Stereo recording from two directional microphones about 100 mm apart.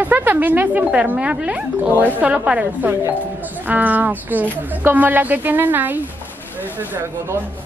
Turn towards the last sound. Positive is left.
turn(degrees=-20)  # may be behind; listen again after turning